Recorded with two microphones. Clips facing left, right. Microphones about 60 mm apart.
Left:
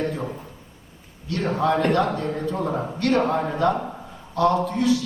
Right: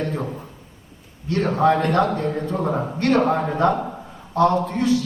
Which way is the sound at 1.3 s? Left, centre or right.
Right.